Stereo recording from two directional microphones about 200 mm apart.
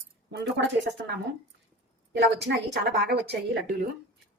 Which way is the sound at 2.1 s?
60° right (ahead or behind).